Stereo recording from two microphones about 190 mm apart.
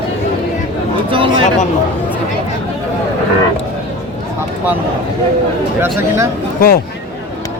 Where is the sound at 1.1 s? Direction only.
25° right (ahead or behind).